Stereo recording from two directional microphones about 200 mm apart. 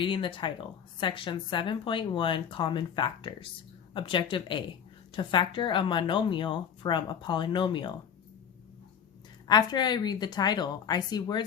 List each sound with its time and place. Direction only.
0.0 s speech: 25° left (ahead or behind)
9.5 s speech: 20° left (ahead or behind)